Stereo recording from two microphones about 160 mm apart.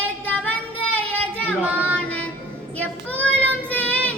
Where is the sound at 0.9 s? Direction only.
10° left (ahead or behind).